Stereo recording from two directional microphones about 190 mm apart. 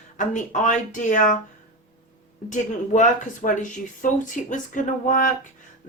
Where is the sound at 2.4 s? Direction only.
40° left (ahead or behind).